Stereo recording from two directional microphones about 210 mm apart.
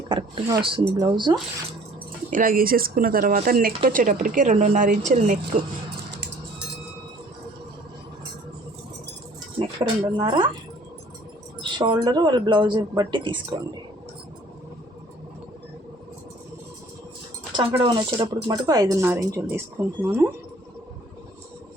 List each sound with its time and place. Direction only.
0.1 s speech: 20° right (ahead or behind)
2.3 s a woman's voice: 40° right (ahead or behind)
9.6 s speech: 25° right (ahead or behind)
11.6 s speech: 20° right (ahead or behind)
17.6 s speech: 25° right (ahead or behind)